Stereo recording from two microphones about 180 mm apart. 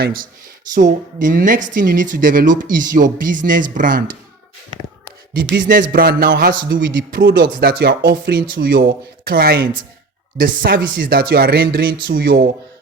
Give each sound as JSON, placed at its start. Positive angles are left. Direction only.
{"t": 0.0, "sound": "speech", "side_deg": -55}
{"t": 5.5, "sound": "speech", "side_deg": -50}